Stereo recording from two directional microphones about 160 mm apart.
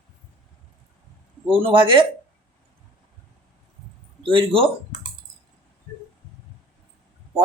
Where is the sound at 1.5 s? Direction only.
35° right (ahead or behind).